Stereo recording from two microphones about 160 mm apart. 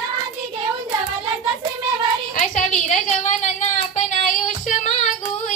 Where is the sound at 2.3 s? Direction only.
50° left (ahead or behind).